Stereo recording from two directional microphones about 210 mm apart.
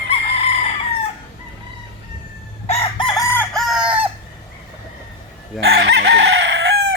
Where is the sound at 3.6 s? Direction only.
5° right (ahead or behind).